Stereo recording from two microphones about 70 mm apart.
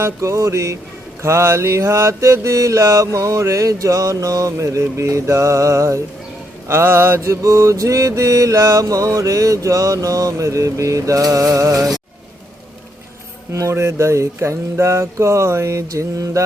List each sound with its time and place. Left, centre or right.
0.0 s mantra: right
6.7 s mantra: right
13.5 s mantra: right